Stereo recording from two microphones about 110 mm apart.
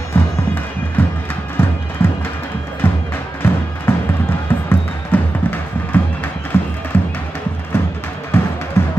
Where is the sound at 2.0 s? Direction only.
20° left (ahead or behind).